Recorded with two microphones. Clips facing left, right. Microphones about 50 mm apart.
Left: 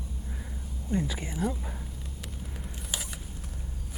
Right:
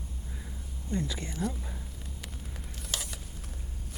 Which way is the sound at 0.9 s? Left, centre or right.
Centre.